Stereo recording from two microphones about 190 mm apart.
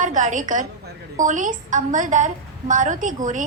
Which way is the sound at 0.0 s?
40° right (ahead or behind).